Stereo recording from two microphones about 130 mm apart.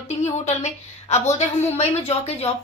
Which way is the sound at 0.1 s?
60° left (ahead or behind).